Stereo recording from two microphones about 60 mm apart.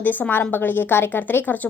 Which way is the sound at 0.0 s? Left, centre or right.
Left.